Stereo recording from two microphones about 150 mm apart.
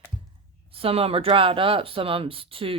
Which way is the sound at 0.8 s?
40° right (ahead or behind).